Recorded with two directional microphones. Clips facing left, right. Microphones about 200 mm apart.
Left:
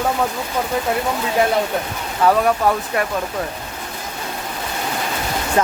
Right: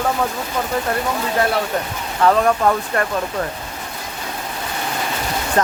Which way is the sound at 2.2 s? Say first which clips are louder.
Right 1 dB; 5° left (ahead or behind).